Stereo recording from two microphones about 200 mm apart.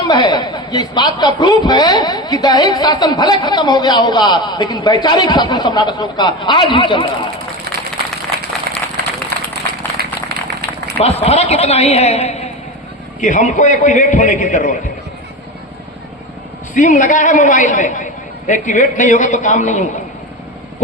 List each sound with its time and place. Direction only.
0.1 s speech: 20° left (ahead or behind)
8.7 s a sound: 50° right (ahead or behind)
11.0 s a man's voice: 30° left (ahead or behind)
16.7 s a man's voice: 40° left (ahead or behind)